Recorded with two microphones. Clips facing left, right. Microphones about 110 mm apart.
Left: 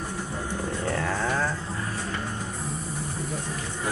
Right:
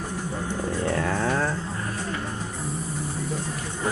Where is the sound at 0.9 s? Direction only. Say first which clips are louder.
Right 1 dB; 5° right (ahead or behind).